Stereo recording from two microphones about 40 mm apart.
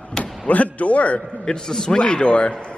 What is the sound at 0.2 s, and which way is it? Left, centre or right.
A man's voice, left.